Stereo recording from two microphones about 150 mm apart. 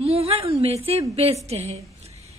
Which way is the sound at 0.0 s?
40° right (ahead or behind).